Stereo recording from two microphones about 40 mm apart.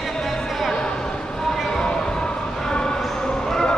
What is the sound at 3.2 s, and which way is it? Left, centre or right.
Basketball bounce, centre.